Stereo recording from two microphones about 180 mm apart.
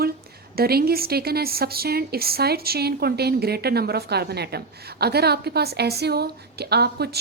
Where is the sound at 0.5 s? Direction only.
60° right (ahead or behind).